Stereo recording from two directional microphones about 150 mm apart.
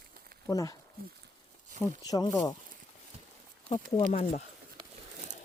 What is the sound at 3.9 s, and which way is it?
Speech, 50° left (ahead or behind).